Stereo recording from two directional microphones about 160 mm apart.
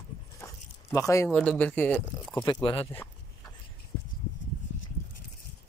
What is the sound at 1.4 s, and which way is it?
Speech, 5° left (ahead or behind).